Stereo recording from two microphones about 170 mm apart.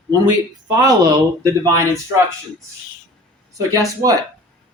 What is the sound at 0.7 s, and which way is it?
Speech, 20° right (ahead or behind).